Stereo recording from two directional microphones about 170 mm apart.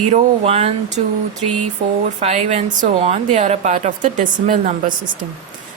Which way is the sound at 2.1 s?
40° right (ahead or behind).